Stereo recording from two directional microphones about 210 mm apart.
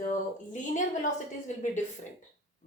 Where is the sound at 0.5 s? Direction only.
35° left (ahead or behind).